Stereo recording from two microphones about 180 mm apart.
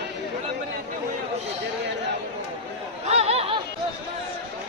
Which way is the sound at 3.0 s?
35° right (ahead or behind).